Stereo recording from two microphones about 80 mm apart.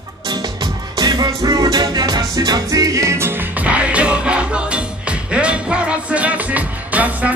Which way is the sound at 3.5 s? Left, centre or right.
Centre.